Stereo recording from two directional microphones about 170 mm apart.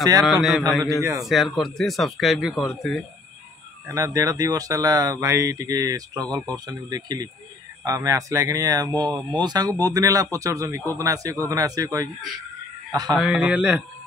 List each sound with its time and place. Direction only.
0.2 s speech: centre (ahead or behind)
3.9 s speech: 20° right (ahead or behind)
13.1 s a man's voice: 5° right (ahead or behind)